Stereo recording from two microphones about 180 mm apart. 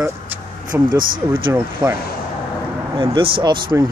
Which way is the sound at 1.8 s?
25° right (ahead or behind).